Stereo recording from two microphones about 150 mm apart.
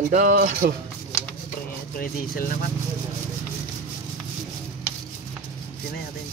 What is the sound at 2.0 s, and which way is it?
Speech, 75° left (ahead or behind).